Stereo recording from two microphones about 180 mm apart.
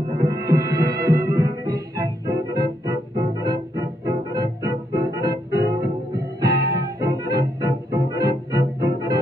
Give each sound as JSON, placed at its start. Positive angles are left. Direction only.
{"t": 0.2, "sound": "music", "side_deg": -20}